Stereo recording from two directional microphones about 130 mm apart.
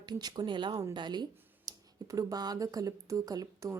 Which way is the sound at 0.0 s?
35° right (ahead or behind).